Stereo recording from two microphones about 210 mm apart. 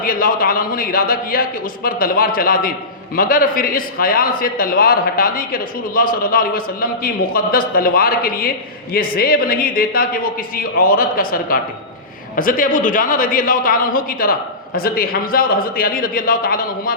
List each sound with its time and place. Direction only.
0.0 s a man's voice: 40° left (ahead or behind)